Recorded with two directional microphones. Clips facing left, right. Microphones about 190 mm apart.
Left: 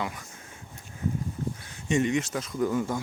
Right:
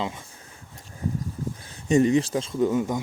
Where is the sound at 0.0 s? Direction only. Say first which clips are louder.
Right 3 dB; 25° right (ahead or behind).